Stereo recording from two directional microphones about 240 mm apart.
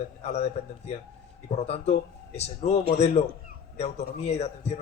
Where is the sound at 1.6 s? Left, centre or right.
Left.